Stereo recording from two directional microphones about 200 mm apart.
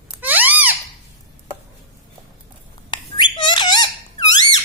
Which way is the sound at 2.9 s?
25° left (ahead or behind).